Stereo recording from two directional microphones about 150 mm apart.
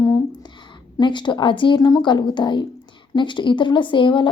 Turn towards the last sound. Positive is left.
turn(degrees=35)  # may be behind; listen again after turning